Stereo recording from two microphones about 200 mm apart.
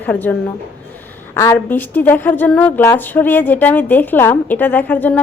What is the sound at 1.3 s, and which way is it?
A woman's voice, 10° left (ahead or behind).